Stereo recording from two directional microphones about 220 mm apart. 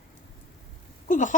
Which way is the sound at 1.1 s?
35° left (ahead or behind).